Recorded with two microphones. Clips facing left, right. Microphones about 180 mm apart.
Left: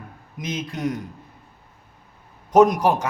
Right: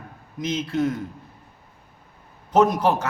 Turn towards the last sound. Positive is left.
turn(degrees=10)  # may be behind; listen again after turning